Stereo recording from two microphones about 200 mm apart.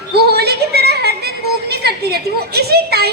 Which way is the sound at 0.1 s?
55° right (ahead or behind).